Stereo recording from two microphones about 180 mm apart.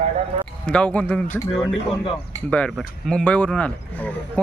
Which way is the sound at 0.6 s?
5° left (ahead or behind).